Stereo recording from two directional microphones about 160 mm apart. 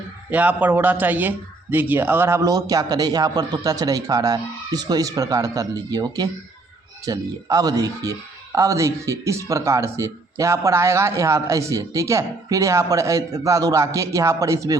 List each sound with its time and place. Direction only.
0.3 s a man's voice: 10° right (ahead or behind)